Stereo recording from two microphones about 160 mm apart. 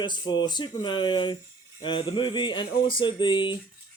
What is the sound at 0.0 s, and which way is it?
A man's voice, 30° left (ahead or behind).